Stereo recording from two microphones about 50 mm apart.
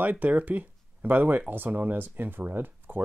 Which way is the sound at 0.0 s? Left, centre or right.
Right.